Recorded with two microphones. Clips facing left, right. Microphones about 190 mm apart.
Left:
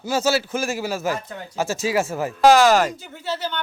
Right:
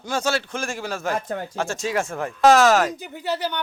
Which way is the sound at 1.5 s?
5° left (ahead or behind).